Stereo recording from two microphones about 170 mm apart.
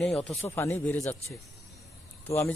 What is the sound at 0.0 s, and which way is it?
A man's voice, 5° left (ahead or behind).